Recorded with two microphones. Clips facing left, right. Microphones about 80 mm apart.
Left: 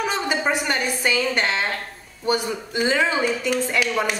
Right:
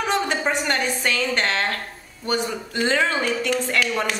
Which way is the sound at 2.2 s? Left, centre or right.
Centre.